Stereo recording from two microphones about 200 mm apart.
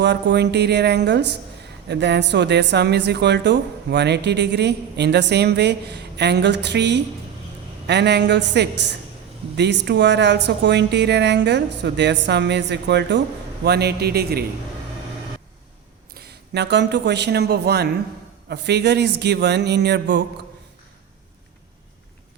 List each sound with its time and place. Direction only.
0.0 s a man's voice: 60° right (ahead or behind)
16.1 s speech: 55° right (ahead or behind)